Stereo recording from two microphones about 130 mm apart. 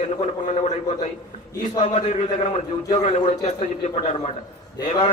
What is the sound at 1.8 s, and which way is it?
A man's voice, 45° left (ahead or behind).